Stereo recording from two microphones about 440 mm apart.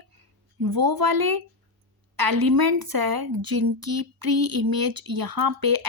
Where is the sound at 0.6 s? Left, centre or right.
Right.